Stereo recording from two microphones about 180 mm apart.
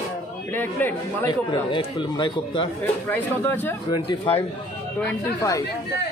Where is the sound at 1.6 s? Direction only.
25° left (ahead or behind).